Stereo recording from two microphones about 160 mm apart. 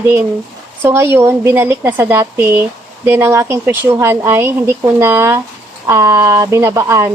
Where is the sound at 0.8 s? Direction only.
15° right (ahead or behind).